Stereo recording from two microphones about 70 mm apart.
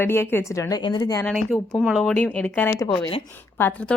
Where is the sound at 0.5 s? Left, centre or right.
Left.